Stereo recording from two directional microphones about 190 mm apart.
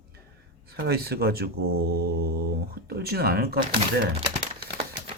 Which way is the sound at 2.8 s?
55° right (ahead or behind).